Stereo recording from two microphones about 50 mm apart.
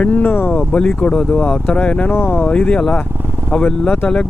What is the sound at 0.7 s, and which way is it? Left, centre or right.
Speech, left.